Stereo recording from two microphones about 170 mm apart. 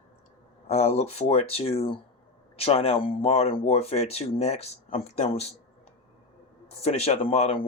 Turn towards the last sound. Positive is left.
turn(degrees=35)  # may be behind; listen again after turning